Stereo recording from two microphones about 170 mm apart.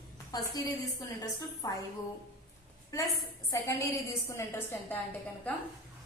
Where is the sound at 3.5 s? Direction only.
15° left (ahead or behind).